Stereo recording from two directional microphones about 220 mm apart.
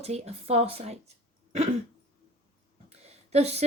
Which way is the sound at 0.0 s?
30° right (ahead or behind).